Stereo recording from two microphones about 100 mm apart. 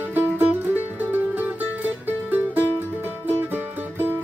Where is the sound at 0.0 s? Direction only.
20° right (ahead or behind).